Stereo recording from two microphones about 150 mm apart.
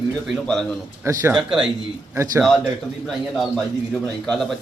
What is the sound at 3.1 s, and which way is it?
Speech, centre (ahead or behind).